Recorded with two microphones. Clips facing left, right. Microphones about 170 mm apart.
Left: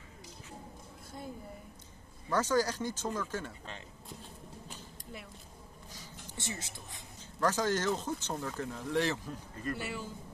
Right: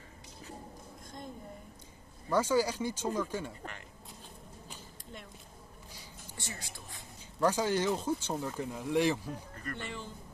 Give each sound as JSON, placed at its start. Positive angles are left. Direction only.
{"t": 2.2, "sound": "speech", "side_deg": -10}
{"t": 4.6, "sound": "a sound", "side_deg": 0}
{"t": 6.3, "sound": "speech", "side_deg": 20}
{"t": 7.3, "sound": "speech", "side_deg": -10}
{"t": 9.6, "sound": "a man's voice", "side_deg": 10}